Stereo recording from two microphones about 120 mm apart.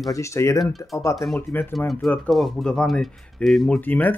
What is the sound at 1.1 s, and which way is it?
Speech, centre (ahead or behind).